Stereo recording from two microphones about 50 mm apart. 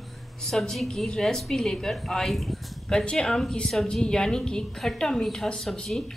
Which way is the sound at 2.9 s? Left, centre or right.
Centre.